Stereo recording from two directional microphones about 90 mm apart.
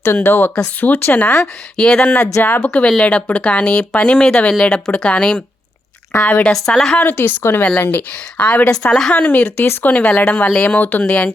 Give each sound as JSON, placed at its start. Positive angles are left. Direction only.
{"t": 0.0, "sound": "speech", "side_deg": 25}
{"t": 1.7, "sound": "speech", "side_deg": 10}
{"t": 6.5, "sound": "a woman's voice", "side_deg": 5}
{"t": 7.0, "sound": "speech", "side_deg": 20}
{"t": 8.7, "sound": "speech", "side_deg": 5}
{"t": 9.1, "sound": "speech", "side_deg": 15}